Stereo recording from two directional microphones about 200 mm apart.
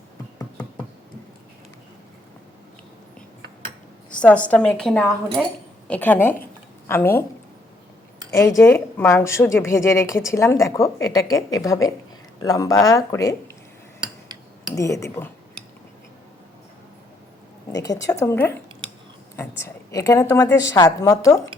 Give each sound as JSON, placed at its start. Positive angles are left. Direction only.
{"t": 4.1, "sound": "speech", "side_deg": 5}
{"t": 8.3, "sound": "speech", "side_deg": 15}
{"t": 14.8, "sound": "speech", "side_deg": 15}
{"t": 17.7, "sound": "a woman's voice", "side_deg": 15}